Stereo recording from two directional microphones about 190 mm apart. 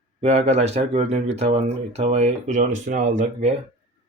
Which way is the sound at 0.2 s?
35° right (ahead or behind).